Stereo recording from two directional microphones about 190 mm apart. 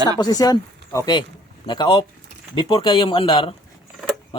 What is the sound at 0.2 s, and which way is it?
A man's voice, 20° left (ahead or behind).